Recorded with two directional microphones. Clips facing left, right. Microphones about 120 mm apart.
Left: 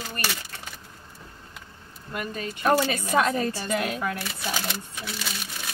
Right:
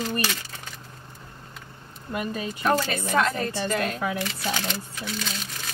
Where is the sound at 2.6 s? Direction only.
10° left (ahead or behind).